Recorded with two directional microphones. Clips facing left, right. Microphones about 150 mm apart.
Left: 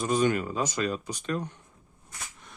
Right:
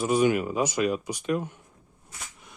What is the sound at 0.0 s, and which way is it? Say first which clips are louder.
Speech: right 3 dB; 10° right (ahead or behind).